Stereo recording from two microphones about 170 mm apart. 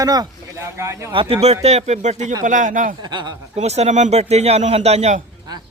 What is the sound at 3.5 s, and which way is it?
A man's voice, 40° right (ahead or behind).